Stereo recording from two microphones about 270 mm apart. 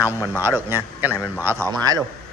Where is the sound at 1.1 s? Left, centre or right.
Centre.